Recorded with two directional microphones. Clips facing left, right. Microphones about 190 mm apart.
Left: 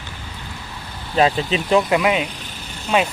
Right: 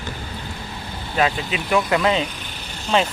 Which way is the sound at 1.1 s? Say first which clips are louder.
Left 4 dB; 30° left (ahead or behind).